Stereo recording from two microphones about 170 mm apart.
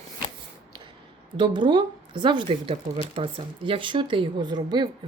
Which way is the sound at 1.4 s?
25° right (ahead or behind).